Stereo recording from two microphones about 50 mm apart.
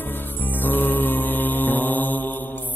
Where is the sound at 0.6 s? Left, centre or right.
Left.